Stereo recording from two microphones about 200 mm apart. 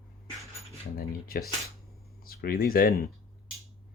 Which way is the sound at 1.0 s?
50° left (ahead or behind).